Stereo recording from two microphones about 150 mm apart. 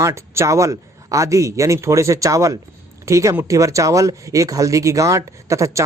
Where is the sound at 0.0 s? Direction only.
20° right (ahead or behind).